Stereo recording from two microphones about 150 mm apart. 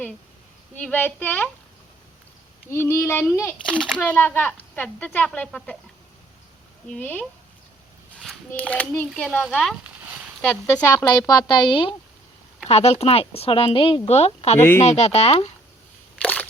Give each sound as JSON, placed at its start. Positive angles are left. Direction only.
{"t": 0.8, "sound": "speech", "side_deg": 10}
{"t": 2.6, "sound": "speech", "side_deg": 15}
{"t": 3.7, "sound": "speech", "side_deg": -5}
{"t": 3.9, "sound": "speech", "side_deg": 10}
{"t": 6.9, "sound": "speech", "side_deg": 10}
{"t": 16.2, "sound": "a sound", "side_deg": 10}